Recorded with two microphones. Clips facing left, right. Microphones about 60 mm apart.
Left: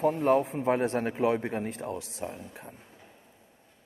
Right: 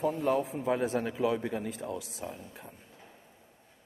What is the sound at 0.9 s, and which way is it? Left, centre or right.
Speech, left.